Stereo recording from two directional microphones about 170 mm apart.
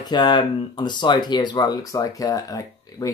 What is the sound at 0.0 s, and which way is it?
Speech, 25° left (ahead or behind).